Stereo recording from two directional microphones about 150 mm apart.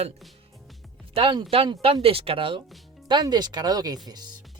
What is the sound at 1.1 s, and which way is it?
Speech, 40° right (ahead or behind).